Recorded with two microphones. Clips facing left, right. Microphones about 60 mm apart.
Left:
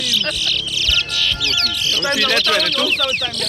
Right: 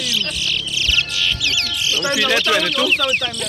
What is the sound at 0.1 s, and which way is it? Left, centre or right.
Speech, right.